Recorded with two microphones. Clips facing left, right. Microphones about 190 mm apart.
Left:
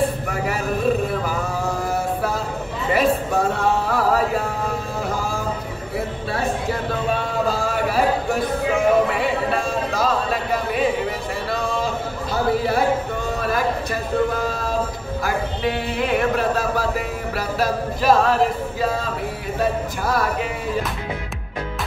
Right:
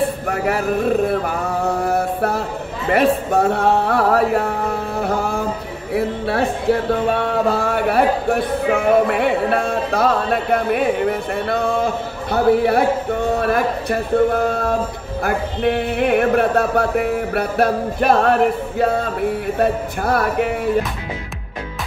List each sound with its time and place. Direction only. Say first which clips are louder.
0.3 s mantra: right 5 dB; 60° right (ahead or behind)
2.9 s a sound: right 3 dB; 60° right (ahead or behind)
15.2 s speech: right 5 dB; 55° right (ahead or behind)